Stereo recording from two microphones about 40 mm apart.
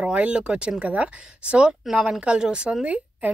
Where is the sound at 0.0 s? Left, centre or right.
Right.